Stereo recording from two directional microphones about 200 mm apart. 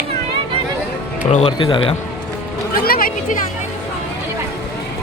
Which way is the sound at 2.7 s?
50° left (ahead or behind).